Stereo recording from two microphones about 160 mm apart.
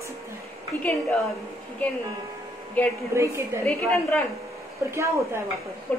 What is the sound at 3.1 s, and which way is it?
Speech, 15° right (ahead or behind).